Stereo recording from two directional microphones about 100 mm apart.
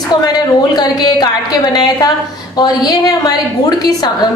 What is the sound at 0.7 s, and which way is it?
A woman's voice, 45° left (ahead or behind).